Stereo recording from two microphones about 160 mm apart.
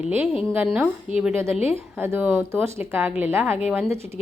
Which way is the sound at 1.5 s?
40° left (ahead or behind).